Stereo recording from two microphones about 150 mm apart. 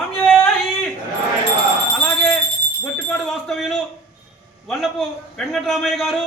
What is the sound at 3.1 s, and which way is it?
Speech, 5° left (ahead or behind).